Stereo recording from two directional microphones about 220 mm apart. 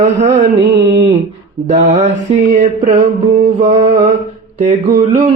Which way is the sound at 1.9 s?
35° right (ahead or behind).